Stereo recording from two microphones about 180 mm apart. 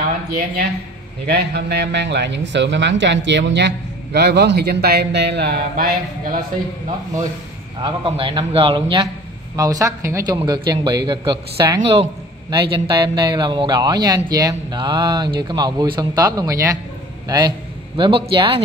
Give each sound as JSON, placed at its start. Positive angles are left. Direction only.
{"t": 1.2, "sound": "a man's voice", "side_deg": -65}
{"t": 7.8, "sound": "a man's voice", "side_deg": -30}